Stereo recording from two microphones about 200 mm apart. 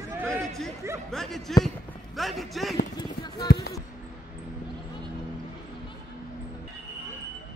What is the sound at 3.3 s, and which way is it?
Speech, 50° left (ahead or behind).